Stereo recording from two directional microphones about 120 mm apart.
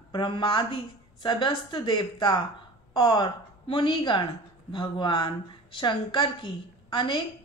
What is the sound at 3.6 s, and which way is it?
A woman's voice, 45° left (ahead or behind).